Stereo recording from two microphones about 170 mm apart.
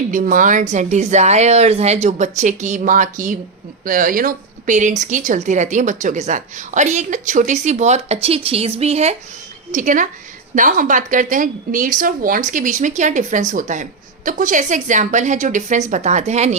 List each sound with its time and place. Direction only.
0.1 s speech: 50° right (ahead or behind)